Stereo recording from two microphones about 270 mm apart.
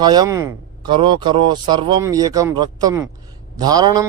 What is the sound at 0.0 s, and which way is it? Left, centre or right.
Speech, centre.